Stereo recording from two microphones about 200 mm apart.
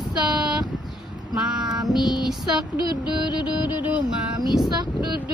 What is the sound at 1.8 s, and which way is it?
Speech, centre (ahead or behind).